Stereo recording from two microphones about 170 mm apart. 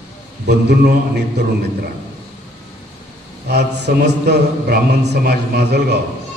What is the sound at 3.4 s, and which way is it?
A man's voice, 75° right (ahead or behind).